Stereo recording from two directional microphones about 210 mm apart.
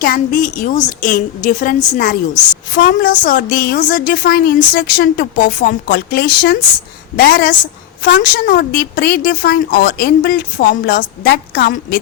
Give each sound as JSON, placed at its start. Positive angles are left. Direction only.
{"t": 0.0, "sound": "a woman's voice", "side_deg": 40}